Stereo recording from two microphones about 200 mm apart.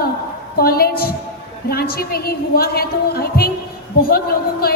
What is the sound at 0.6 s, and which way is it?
A man's voice, 50° left (ahead or behind).